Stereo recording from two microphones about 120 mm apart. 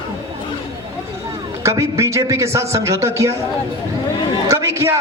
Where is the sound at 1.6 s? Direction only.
25° right (ahead or behind).